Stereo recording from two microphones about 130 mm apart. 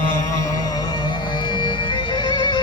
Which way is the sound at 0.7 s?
35° left (ahead or behind).